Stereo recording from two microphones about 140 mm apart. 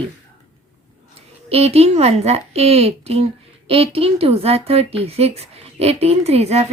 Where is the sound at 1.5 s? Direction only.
45° right (ahead or behind).